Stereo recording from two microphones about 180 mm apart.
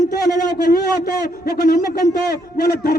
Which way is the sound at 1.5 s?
55° left (ahead or behind).